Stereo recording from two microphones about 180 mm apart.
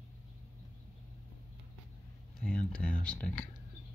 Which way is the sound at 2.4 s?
5° left (ahead or behind).